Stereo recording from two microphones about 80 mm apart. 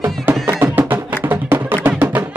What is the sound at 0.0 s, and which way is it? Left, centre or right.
Music, right.